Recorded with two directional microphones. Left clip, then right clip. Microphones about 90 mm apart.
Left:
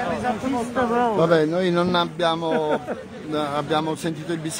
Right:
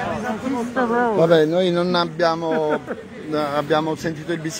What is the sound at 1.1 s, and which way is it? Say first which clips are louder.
Speech: right 3 dB; centre (ahead or behind).